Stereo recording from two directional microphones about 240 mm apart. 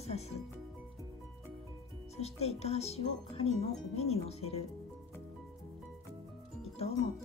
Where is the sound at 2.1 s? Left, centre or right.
Left.